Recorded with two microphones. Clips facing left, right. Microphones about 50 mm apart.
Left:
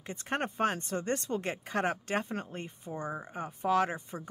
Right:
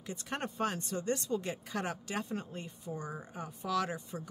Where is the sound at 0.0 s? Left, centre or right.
Left.